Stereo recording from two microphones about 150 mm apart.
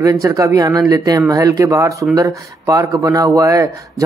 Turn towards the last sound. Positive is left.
turn(degrees=-20)  # may be behind; listen again after turning